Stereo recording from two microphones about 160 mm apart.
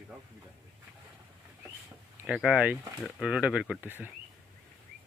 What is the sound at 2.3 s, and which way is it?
A man's voice, 5° right (ahead or behind).